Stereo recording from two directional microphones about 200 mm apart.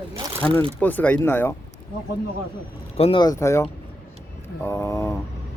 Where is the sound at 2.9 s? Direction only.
30° left (ahead or behind).